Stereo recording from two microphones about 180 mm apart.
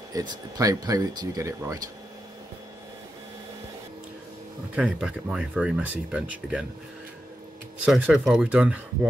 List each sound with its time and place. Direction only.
0.1 s speech: 20° right (ahead or behind)
4.7 s speech: 5° right (ahead or behind)
7.8 s speech: 5° right (ahead or behind)